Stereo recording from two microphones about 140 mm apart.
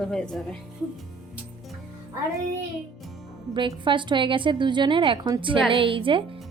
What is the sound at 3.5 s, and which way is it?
A woman's voice, 35° right (ahead or behind).